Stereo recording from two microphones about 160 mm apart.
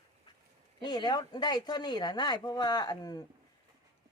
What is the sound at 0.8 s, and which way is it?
Speech, 25° left (ahead or behind).